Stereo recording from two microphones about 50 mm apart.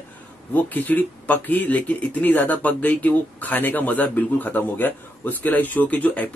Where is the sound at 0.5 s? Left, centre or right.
Left.